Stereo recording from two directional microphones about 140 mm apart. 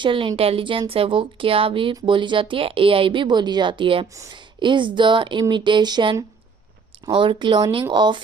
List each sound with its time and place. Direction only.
0.0 s speech: 35° right (ahead or behind)
4.1 s speech: 20° right (ahead or behind)
4.4 s speech: 35° right (ahead or behind)